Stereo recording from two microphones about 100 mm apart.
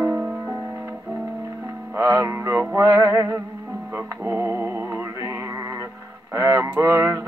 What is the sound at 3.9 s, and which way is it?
Mantra, 20° right (ahead or behind).